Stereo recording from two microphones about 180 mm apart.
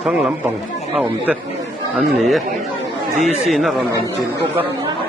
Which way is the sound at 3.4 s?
Centre (ahead or behind).